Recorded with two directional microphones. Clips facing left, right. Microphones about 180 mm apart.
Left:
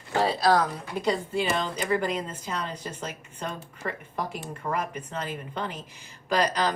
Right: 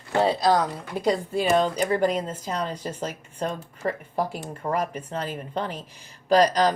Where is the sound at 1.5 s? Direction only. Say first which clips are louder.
Right 5 dB; 40° right (ahead or behind).